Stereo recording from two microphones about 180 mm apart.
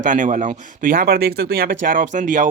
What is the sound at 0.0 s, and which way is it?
Speech, 45° right (ahead or behind).